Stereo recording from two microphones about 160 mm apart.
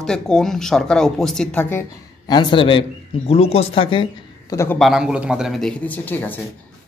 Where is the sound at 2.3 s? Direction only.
30° left (ahead or behind).